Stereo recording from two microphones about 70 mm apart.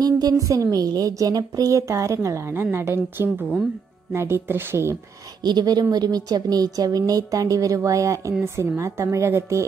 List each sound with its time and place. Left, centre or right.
0.0 s a woman's voice: right
1.8 s a woman's voice: right
2.6 s speech: right
5.4 s a woman's voice: right